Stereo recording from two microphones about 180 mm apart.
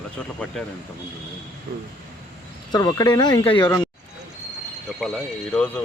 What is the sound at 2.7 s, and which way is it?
Speech, 20° left (ahead or behind).